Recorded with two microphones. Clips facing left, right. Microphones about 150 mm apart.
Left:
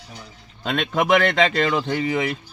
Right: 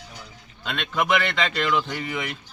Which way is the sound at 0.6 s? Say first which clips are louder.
Left 4 dB; 50° left (ahead or behind).